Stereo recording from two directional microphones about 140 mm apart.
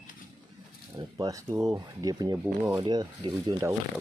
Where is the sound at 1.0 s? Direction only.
25° right (ahead or behind).